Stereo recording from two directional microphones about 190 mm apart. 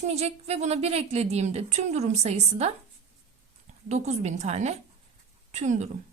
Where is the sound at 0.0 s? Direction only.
35° right (ahead or behind).